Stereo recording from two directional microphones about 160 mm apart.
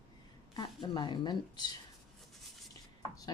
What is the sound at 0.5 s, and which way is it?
Speech, 30° left (ahead or behind).